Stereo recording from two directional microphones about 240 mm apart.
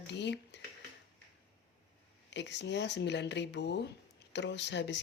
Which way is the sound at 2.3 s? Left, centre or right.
Left.